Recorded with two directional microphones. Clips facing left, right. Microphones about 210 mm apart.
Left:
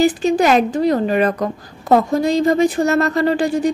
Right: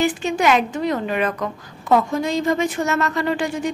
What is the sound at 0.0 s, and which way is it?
A woman's voice, 35° left (ahead or behind).